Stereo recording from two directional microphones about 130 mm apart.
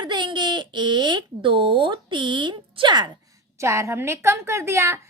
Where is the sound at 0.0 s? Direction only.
35° right (ahead or behind).